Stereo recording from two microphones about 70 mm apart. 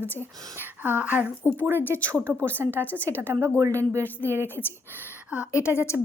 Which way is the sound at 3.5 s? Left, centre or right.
Right.